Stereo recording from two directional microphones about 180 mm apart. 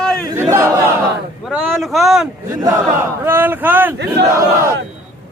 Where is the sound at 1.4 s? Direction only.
Centre (ahead or behind).